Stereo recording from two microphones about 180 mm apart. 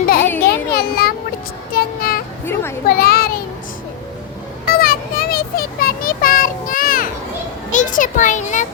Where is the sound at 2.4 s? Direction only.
15° left (ahead or behind).